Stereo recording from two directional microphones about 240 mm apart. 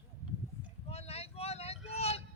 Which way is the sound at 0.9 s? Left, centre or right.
Left.